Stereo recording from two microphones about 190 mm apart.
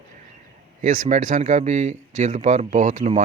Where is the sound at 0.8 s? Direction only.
40° right (ahead or behind).